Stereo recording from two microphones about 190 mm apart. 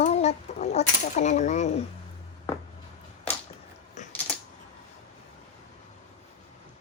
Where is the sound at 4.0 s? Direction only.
40° left (ahead or behind).